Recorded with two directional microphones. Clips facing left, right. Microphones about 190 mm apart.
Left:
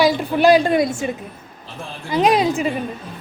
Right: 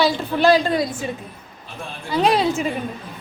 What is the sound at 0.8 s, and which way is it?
Speech, 25° left (ahead or behind).